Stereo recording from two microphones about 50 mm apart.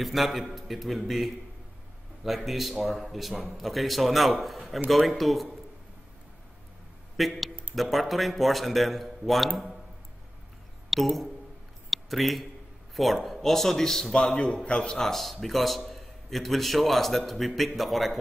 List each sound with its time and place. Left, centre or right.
0.0 s a man's voice: centre
7.2 s a man's voice: centre
10.9 s speech: centre
11.9 s a sound: centre
12.9 s a man's voice: centre
14.2 s a man's voice: left
15.4 s a man's voice: centre